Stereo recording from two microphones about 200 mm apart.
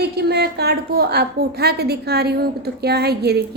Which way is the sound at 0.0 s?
55° right (ahead or behind).